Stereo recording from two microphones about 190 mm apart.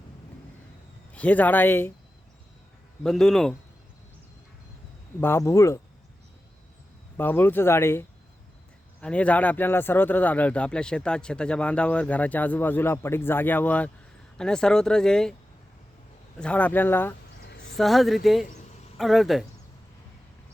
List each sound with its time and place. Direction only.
1.1 s speech: 10° left (ahead or behind)
3.0 s speech: 5° left (ahead or behind)
5.2 s speech: 15° left (ahead or behind)
7.2 s speech: 10° left (ahead or behind)
16.4 s speech: 5° left (ahead or behind)
17.4 s a sound: 65° left (ahead or behind)
17.7 s speech: centre (ahead or behind)